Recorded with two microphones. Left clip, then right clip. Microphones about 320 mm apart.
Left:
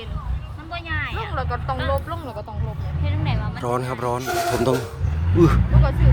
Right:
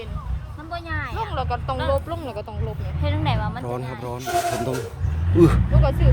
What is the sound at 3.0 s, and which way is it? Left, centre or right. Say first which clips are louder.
Speech: right 5 dB; centre.